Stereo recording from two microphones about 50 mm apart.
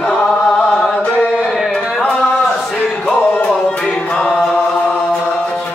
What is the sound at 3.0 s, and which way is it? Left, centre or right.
Music, left.